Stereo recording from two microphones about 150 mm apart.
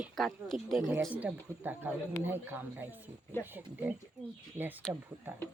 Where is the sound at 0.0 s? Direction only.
Centre (ahead or behind).